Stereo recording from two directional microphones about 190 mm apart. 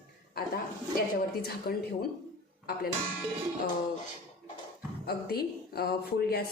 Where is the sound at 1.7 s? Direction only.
50° left (ahead or behind).